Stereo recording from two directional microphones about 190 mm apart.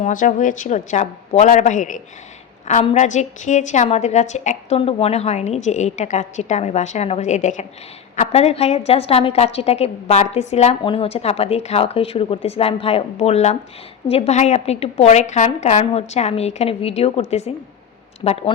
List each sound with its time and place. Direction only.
0.0 s a woman's voice: 45° left (ahead or behind)